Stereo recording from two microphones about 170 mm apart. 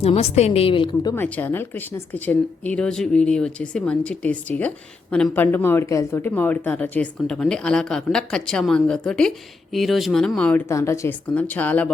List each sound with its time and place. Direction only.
0.0 s a woman's voice: 35° left (ahead or behind)
1.1 s speech: 10° left (ahead or behind)
10.7 s speech: 15° left (ahead or behind)